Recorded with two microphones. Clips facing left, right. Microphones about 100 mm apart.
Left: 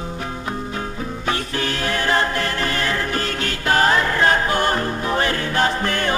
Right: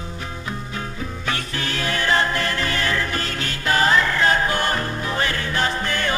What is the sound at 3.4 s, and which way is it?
Music, 50° left (ahead or behind).